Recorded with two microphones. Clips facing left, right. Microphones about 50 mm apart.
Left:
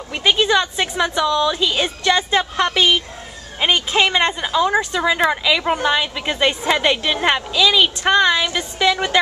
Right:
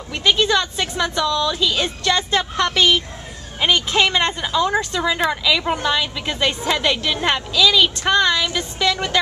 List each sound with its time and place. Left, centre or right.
0.1 s speech: centre